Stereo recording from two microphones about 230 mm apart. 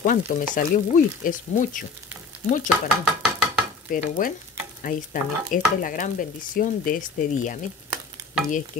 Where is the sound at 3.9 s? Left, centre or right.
Left.